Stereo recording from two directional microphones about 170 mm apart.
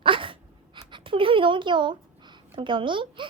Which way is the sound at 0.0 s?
30° right (ahead or behind).